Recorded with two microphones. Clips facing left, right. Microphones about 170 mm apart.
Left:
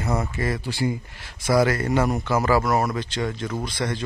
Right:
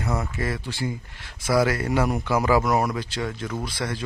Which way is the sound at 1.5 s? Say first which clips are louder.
Left 2 dB; 5° right (ahead or behind).